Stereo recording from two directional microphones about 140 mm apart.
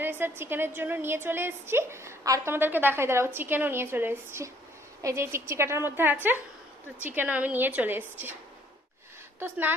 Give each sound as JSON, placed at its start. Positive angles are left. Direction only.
{"t": 0.0, "sound": "a woman's voice", "side_deg": -15}
{"t": 9.4, "sound": "a woman's voice", "side_deg": -15}